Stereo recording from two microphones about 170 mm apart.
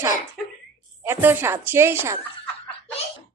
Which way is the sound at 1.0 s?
15° right (ahead or behind).